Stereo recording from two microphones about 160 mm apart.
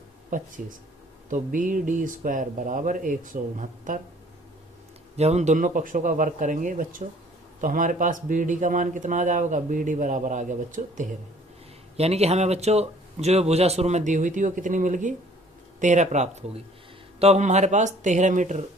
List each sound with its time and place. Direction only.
0.3 s speech: 55° right (ahead or behind)
5.1 s speech: 45° right (ahead or behind)
11.9 s speech: 40° right (ahead or behind)